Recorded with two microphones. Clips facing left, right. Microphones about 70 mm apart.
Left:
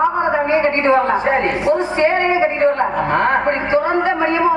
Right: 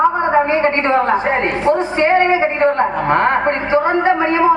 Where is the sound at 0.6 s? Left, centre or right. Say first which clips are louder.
Even; right.